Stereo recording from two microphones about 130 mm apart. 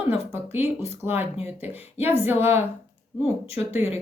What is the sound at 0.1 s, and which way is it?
A woman's voice, 20° right (ahead or behind).